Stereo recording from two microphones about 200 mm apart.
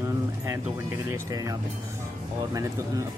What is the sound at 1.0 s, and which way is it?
Speech, 15° right (ahead or behind).